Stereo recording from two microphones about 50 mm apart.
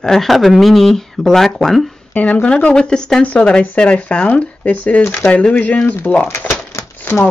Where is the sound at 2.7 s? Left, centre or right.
Centre; by 5.9 s left.